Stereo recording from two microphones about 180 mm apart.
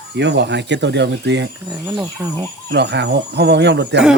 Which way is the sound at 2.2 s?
15° right (ahead or behind).